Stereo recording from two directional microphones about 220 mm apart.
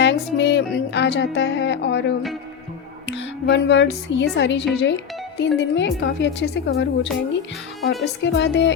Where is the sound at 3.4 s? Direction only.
55° left (ahead or behind).